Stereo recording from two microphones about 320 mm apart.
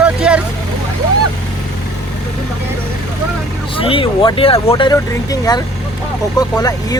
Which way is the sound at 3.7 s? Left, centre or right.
Centre.